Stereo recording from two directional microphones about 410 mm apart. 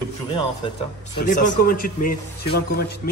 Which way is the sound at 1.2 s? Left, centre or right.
Centre.